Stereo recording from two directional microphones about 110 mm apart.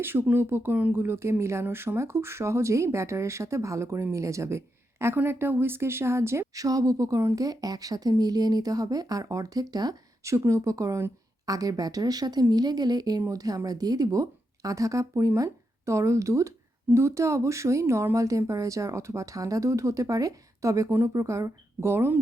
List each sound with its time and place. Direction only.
0.0 s speech: 20° right (ahead or behind)